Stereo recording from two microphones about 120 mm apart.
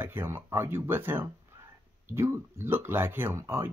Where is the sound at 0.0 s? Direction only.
20° right (ahead or behind).